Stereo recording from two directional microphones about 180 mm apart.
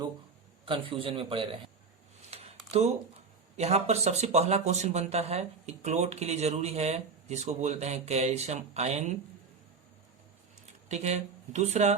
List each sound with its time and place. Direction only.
0.6 s a man's voice: 30° right (ahead or behind)
2.3 s a sound: 35° right (ahead or behind)
3.6 s speech: 35° right (ahead or behind)
10.8 s speech: 35° right (ahead or behind)